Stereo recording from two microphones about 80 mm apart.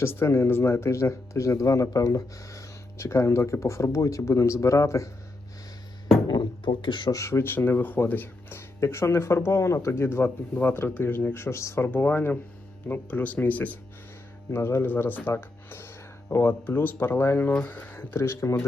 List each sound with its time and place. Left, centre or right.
0.0 s speech: left
6.2 s a sound: left
7.1 s speech: left
11.4 s speech: left
11.9 s speech: left
14.5 s speech: left